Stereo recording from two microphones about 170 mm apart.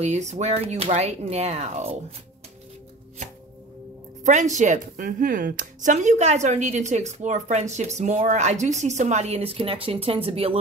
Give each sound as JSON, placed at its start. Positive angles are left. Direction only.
{"t": 0.0, "sound": "speech", "side_deg": -45}
{"t": 4.2, "sound": "speech", "side_deg": -45}